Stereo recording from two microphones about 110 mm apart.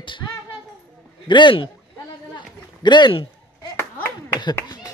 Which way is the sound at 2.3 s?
45° left (ahead or behind).